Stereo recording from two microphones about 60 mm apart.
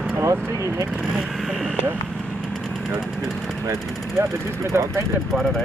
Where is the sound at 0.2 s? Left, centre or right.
Right.